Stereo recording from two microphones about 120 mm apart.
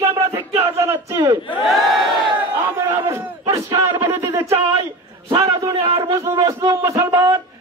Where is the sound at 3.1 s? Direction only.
25° right (ahead or behind).